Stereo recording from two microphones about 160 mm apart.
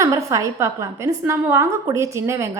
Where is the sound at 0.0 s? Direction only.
20° right (ahead or behind).